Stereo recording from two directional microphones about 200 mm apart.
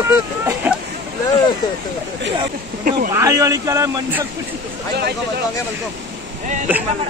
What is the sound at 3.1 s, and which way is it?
Speech, 15° right (ahead or behind).